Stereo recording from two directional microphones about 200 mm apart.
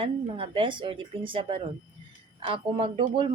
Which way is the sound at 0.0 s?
25° right (ahead or behind).